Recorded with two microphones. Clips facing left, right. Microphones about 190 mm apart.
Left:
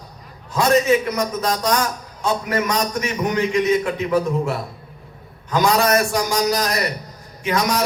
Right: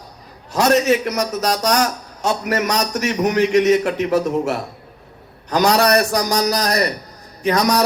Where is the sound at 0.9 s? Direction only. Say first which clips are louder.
Even; 40° right (ahead or behind).